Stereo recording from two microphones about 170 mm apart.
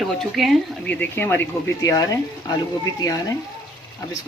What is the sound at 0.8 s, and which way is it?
Speech, 10° left (ahead or behind).